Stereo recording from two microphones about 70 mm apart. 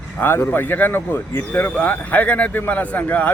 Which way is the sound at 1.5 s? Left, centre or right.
Left.